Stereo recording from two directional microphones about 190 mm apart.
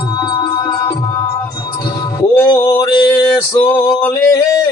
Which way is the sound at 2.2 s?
20° left (ahead or behind).